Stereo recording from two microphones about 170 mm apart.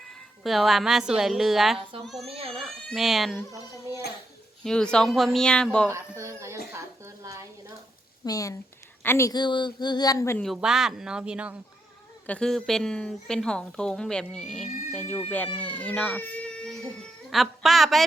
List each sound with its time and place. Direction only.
0.1 s a woman's voice: centre (ahead or behind)
2.3 s speech: 35° right (ahead or behind)
2.6 s a woman's voice: centre (ahead or behind)
3.5 s speech: 15° right (ahead or behind)
4.6 s a woman's voice: 5° left (ahead or behind)
5.9 s speech: 15° right (ahead or behind)
6.7 s a sound: 15° right (ahead or behind)
8.2 s a woman's voice: 20° left (ahead or behind)
10.3 s a woman's voice: centre (ahead or behind)
12.2 s a woman's voice: 5° left (ahead or behind)
15.5 s a woman's voice: 10° left (ahead or behind)